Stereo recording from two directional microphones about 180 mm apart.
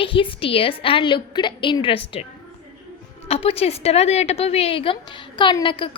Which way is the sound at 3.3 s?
30° left (ahead or behind).